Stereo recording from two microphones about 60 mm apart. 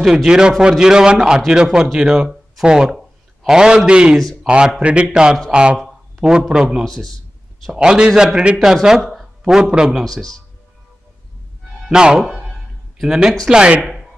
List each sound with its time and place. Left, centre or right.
0.0 s a man's voice: centre
6.8 s speech: centre
7.7 s a man's voice: centre
10.0 s speech: centre
11.9 s a man's voice: centre